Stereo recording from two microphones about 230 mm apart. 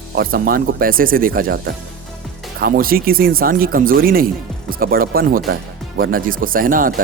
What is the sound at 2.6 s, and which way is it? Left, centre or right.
Speech, right.